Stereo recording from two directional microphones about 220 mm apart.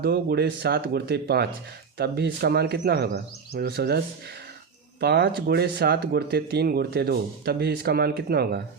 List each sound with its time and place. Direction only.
0.0 s speech: 45° right (ahead or behind)